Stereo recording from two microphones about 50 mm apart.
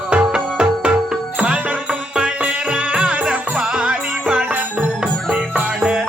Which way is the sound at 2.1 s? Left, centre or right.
Right.